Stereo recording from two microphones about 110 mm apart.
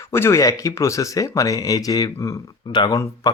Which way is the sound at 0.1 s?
25° left (ahead or behind).